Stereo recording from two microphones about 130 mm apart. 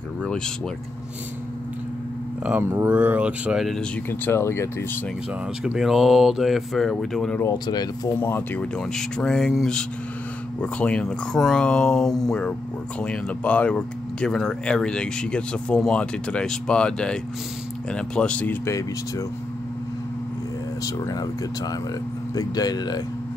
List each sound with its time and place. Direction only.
2.6 s speech: 20° right (ahead or behind)
3.6 s speech: 5° left (ahead or behind)
4.1 s speech: 15° left (ahead or behind)
5.6 s speech: 5° right (ahead or behind)
7.5 s speech: 30° left (ahead or behind)
8.2 s speech: 15° left (ahead or behind)
18.7 s speech: 25° left (ahead or behind)
20.8 s speech: 30° left (ahead or behind)
22.3 s speech: 30° left (ahead or behind)